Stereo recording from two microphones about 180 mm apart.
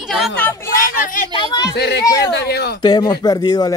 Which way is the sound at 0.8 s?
50° left (ahead or behind).